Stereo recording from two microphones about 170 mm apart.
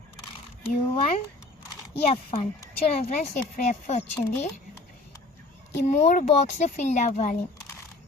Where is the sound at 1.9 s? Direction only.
35° left (ahead or behind).